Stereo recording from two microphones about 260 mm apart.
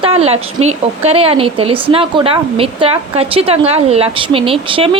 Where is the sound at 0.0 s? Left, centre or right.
Right.